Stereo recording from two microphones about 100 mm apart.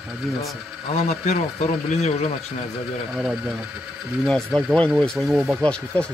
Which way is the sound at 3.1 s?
Centre (ahead or behind).